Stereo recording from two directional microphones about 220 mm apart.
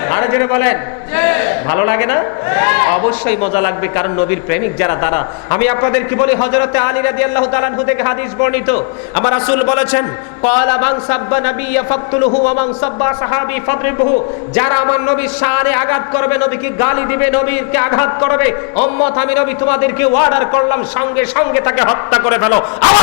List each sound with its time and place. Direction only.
0.1 s a man's voice: 15° left (ahead or behind)